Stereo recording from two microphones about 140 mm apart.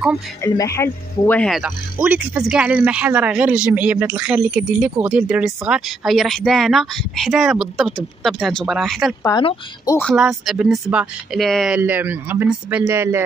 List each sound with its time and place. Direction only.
0.4 s speech: 20° left (ahead or behind)
1.5 s speech: 5° right (ahead or behind)
10.1 s speech: 5° right (ahead or behind)
11.8 s speech: 15° right (ahead or behind)